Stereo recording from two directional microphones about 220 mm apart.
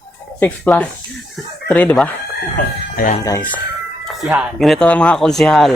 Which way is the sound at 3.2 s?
10° left (ahead or behind).